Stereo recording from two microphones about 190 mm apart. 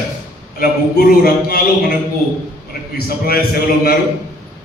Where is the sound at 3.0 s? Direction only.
50° left (ahead or behind).